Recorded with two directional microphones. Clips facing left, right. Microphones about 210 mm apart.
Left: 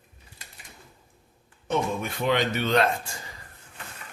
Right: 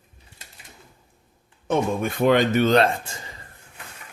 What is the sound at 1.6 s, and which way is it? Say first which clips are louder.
Speech: right 4 dB; 50° right (ahead or behind).